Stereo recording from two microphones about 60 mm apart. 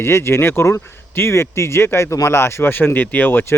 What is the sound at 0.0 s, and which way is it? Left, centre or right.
Speech, left.